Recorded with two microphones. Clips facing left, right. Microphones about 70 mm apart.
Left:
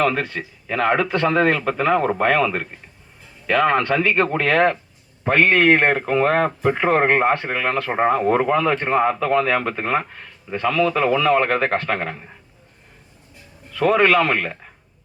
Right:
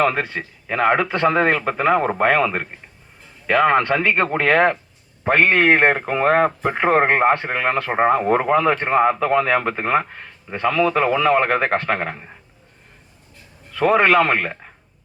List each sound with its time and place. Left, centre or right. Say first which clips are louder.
0.0 s speech: right 1 dB; right
3.7 s speech: right 1 dB; right
14.0 s speech: right 1 dB; right